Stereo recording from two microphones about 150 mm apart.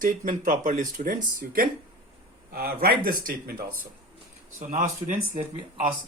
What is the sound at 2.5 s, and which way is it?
Speech, 85° right.